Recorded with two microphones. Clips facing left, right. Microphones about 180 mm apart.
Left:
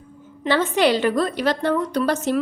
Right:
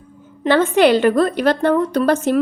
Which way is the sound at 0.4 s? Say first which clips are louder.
Right 5 dB; 55° right (ahead or behind).